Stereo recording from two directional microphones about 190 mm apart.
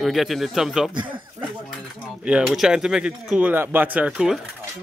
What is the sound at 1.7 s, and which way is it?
Speech, 5° right (ahead or behind).